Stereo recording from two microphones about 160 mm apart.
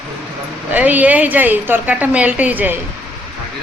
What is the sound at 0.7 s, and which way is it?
A woman's voice, 10° right (ahead or behind).